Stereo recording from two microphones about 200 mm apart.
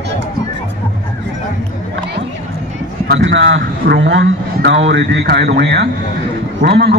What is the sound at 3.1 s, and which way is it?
A man's voice, 65° right (ahead or behind).